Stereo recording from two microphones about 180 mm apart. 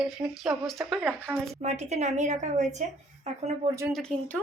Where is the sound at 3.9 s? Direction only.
5° left (ahead or behind).